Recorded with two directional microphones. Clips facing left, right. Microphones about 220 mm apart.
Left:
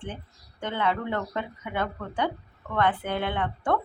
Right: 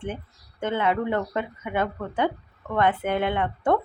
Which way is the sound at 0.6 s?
20° right (ahead or behind).